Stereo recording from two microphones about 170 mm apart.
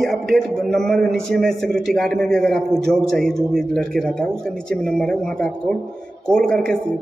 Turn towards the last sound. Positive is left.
turn(degrees=5)  # may be behind; listen again after turning